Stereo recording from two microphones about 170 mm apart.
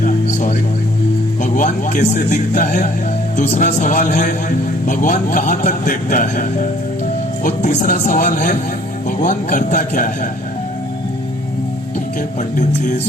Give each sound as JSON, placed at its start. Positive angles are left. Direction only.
{"t": 0.0, "sound": "music", "side_deg": 45}
{"t": 1.4, "sound": "a man's voice", "side_deg": 45}
{"t": 12.4, "sound": "a man's voice", "side_deg": 45}